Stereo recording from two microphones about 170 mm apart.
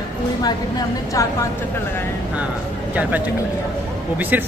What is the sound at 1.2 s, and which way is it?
Speech, 20° left (ahead or behind).